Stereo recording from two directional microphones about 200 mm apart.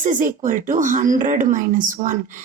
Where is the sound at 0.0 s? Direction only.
40° right (ahead or behind).